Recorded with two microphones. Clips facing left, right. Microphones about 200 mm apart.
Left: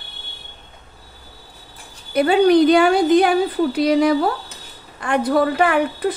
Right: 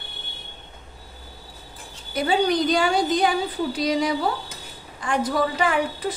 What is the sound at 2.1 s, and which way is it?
A woman's voice, 60° left (ahead or behind).